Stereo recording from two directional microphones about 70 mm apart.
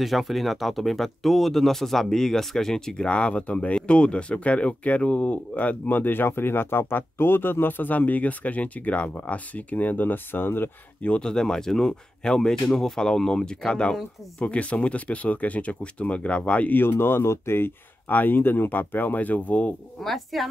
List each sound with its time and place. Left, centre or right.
0.0 s speech: centre; by 10.7 s left
11.1 s speech: centre
20.0 s speech: centre